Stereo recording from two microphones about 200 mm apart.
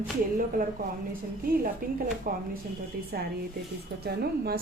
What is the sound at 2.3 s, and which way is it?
Speech, 45° right (ahead or behind).